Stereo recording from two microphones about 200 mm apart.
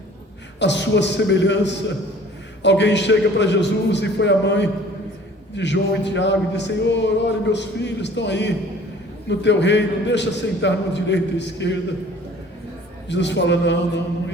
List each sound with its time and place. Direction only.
0.6 s music: 60° left (ahead or behind)
13.1 s music: 60° left (ahead or behind)